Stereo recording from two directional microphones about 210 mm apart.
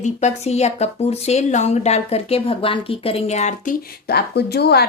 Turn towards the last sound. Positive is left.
turn(degrees=50)  # may be behind; listen again after turning